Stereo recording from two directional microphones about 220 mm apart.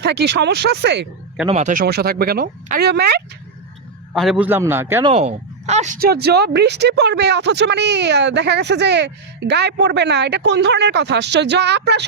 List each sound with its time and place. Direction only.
0.0 s speech: 50° right (ahead or behind)
1.5 s speech: 30° right (ahead or behind); by 3.2 s 45° right (ahead or behind)
4.1 s a man's voice: centre (ahead or behind)
5.0 s speech: 30° right (ahead or behind); by 12.0 s 50° right (ahead or behind)